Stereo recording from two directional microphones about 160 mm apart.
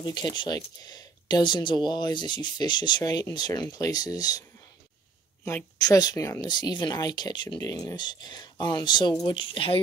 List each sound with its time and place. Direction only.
0.0 s speech: 25° left (ahead or behind)